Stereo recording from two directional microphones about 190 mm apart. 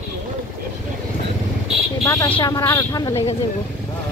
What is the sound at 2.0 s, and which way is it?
A woman's voice, 15° left (ahead or behind).